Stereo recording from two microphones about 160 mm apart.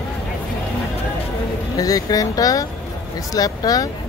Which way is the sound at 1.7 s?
20° left (ahead or behind).